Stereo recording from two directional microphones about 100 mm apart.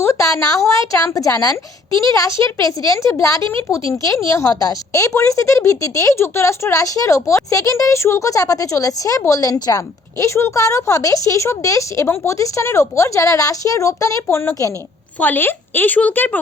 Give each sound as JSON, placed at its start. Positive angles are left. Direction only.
{"t": 0.0, "sound": "a woman's voice", "side_deg": 30}